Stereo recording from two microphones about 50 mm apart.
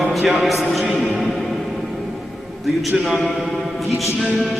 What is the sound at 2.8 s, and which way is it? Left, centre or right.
Speech, centre.